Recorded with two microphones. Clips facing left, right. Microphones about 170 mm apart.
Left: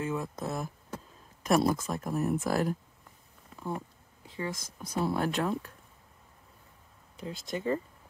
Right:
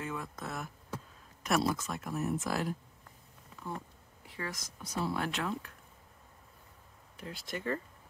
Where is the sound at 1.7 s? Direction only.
35° left (ahead or behind).